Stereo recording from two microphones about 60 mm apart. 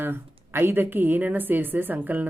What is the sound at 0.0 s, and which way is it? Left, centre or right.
Speech, right.